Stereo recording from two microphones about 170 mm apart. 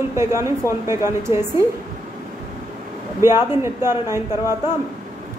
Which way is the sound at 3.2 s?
15° right (ahead or behind).